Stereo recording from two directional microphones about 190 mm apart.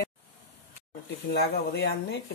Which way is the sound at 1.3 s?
60° left (ahead or behind).